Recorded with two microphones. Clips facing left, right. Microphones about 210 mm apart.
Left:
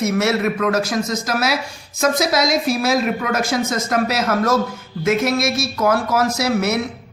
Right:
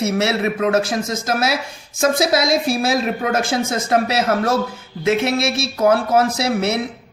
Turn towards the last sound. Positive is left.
turn(degrees=-30)  # may be behind; listen again after turning